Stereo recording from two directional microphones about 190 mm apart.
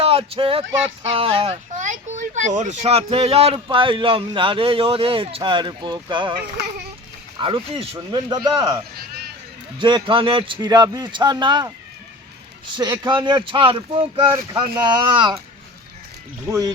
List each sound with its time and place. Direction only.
0.0 s speech: 30° right (ahead or behind)
7.4 s speech: 25° right (ahead or behind)
12.7 s speech: 20° right (ahead or behind)
16.5 s speech: 20° right (ahead or behind)